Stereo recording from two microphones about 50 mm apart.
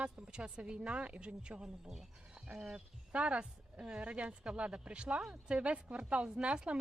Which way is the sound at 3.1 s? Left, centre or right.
Right.